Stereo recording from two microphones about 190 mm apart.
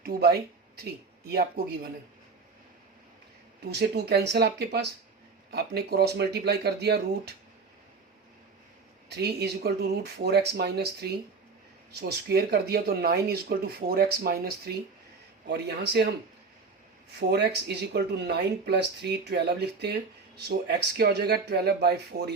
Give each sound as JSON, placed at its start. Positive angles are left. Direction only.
{"t": 0.0, "sound": "speech", "side_deg": -55}
{"t": 3.7, "sound": "speech", "side_deg": -60}
{"t": 9.0, "sound": "speech", "side_deg": -60}
{"t": 17.1, "sound": "speech", "side_deg": -60}